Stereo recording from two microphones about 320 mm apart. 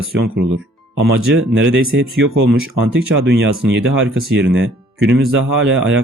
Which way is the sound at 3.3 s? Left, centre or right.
Right.